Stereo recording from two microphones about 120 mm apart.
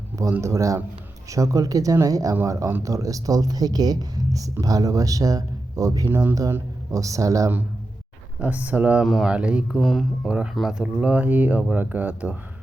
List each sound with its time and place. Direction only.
0.2 s speech: 25° right (ahead or behind)
8.4 s speech: 10° right (ahead or behind)
10.2 s speech: 10° right (ahead or behind)